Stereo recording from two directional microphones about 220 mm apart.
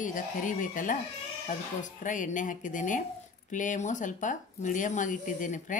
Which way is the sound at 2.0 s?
35° left (ahead or behind).